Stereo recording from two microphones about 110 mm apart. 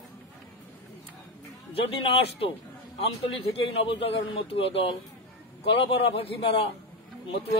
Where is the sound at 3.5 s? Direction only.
60° left (ahead or behind).